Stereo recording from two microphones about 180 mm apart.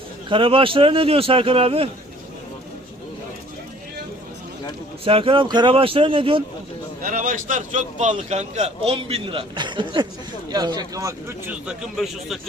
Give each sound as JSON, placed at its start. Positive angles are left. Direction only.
{"t": 0.3, "sound": "speech", "side_deg": -30}
{"t": 5.0, "sound": "speech", "side_deg": -30}
{"t": 7.0, "sound": "speech", "side_deg": -50}